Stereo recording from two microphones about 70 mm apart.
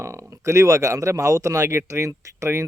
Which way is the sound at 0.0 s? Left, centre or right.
Right.